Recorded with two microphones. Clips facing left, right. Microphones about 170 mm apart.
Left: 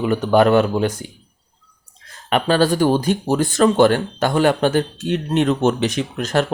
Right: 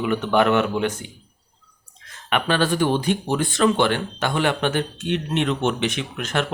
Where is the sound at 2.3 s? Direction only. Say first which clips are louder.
Left 5 dB; 35° left (ahead or behind).